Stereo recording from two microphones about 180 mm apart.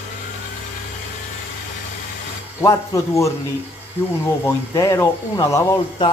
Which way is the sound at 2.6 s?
15° left (ahead or behind).